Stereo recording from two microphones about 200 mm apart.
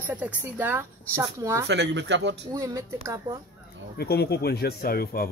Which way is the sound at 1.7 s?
60° right (ahead or behind).